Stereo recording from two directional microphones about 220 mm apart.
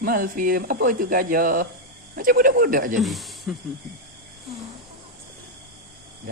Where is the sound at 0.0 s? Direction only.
40° right (ahead or behind).